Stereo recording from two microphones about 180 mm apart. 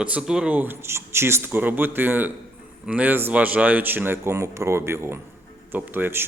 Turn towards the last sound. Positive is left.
turn(degrees=-10)  # may be behind; listen again after turning